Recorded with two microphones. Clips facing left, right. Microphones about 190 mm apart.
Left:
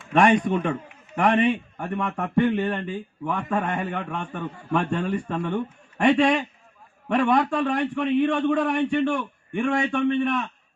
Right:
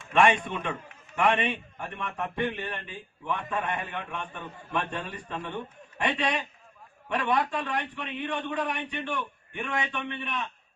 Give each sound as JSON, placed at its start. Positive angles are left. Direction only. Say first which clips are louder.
{"t": 0.1, "sound": "a man's voice", "louder": "left 5 dB", "side_deg": 40}